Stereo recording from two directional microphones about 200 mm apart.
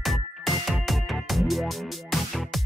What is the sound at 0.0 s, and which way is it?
Music, centre (ahead or behind).